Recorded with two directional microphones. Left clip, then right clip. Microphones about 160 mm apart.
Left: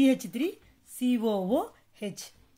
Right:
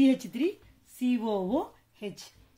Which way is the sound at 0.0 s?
30° left (ahead or behind).